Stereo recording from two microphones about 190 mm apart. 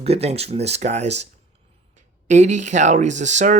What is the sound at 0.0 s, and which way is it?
Speech, 35° right (ahead or behind).